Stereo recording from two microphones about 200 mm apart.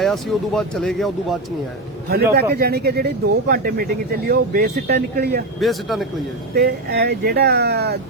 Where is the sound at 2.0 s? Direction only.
50° right (ahead or behind).